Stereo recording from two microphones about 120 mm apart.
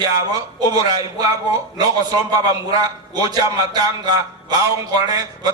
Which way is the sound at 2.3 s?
35° right (ahead or behind).